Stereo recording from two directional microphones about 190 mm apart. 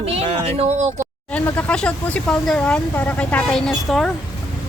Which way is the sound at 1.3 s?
5° left (ahead or behind).